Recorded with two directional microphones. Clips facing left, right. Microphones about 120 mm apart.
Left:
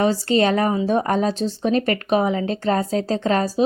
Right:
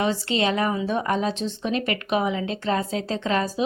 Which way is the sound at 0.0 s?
40° left (ahead or behind).